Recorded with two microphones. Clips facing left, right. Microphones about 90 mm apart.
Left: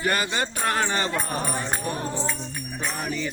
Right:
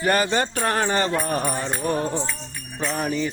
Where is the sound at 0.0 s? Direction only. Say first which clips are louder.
Right 4 dB; 35° right (ahead or behind).